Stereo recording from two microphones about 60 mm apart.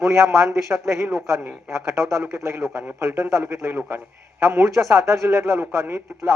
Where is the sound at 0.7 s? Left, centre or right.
Right.